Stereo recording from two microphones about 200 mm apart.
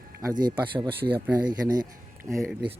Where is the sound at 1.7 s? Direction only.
15° right (ahead or behind).